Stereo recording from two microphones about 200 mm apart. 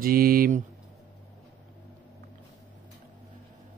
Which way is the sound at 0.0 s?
45° right (ahead or behind).